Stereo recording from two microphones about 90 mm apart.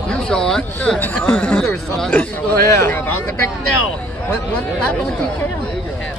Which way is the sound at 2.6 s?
35° left (ahead or behind).